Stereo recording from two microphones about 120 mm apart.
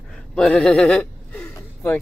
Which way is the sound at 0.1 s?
5° left (ahead or behind).